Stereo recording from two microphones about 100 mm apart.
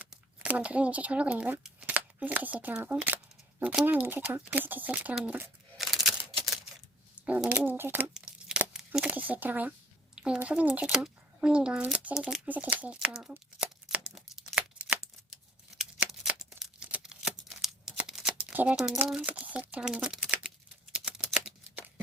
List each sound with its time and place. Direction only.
0.4 s a child's voice: 15° right (ahead or behind)
5.7 s a sound: centre (ahead or behind)
7.2 s speech: 15° right (ahead or behind)
8.1 s tearing: 5° right (ahead or behind)
9.0 s speech: 15° right (ahead or behind)
12.5 s crumpling: 15° right (ahead or behind)
15.8 s a sound: 10° right (ahead or behind)
17.0 s shuffling cards: 5° right (ahead or behind)
18.5 s speech: 15° right (ahead or behind)
20.9 s a sound: 10° right (ahead or behind)